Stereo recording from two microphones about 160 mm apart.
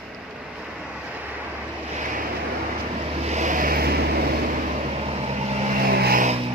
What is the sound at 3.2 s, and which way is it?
Vehicle, 45° right (ahead or behind).